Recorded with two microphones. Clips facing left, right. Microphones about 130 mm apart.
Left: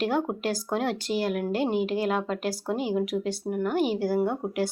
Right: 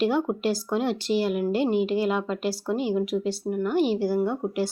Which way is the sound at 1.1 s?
Centre (ahead or behind).